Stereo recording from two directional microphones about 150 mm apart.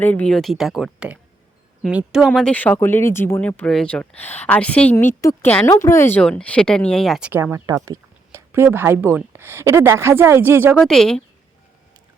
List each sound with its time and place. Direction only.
0.0 s speech: 10° left (ahead or behind)
7.3 s speech: 10° right (ahead or behind)
10.8 s speech: 5° left (ahead or behind)